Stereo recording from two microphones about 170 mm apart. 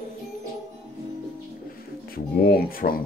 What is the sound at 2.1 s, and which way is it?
Speech, 60° left (ahead or behind).